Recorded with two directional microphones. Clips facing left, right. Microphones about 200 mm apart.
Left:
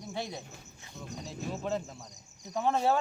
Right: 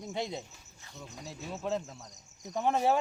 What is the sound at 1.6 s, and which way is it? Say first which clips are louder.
Speech: right 2 dB; centre (ahead or behind).